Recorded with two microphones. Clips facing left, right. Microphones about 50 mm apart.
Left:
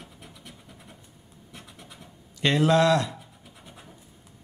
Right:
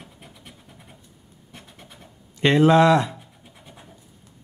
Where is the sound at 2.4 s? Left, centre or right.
Right.